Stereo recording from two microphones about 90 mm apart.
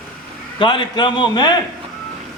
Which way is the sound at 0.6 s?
60° left (ahead or behind).